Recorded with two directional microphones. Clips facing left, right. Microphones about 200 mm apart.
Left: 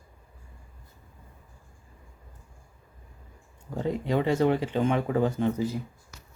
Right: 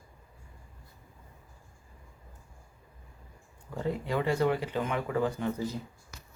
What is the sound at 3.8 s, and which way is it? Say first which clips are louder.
Speech: left 4 dB; 20° left (ahead or behind).